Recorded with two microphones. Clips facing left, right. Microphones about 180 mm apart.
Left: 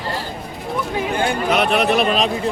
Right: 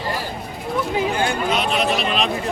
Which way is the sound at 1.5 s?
60° left (ahead or behind).